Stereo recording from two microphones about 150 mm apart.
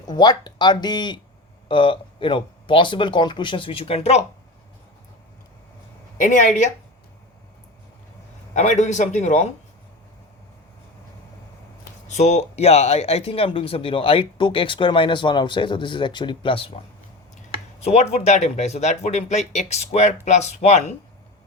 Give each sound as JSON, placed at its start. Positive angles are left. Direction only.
{"t": 0.1, "sound": "speech", "side_deg": 30}
{"t": 6.1, "sound": "speech", "side_deg": 60}
{"t": 8.5, "sound": "speech", "side_deg": 55}
{"t": 12.0, "sound": "speech", "side_deg": 50}
{"t": 17.7, "sound": "speech", "side_deg": 45}